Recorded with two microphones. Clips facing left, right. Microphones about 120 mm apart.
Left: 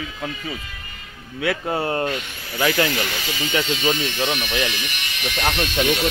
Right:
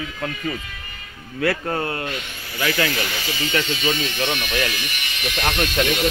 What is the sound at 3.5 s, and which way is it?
Speech, 15° left (ahead or behind).